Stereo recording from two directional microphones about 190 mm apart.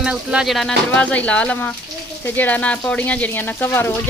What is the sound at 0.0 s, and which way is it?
Speech, 5° right (ahead or behind).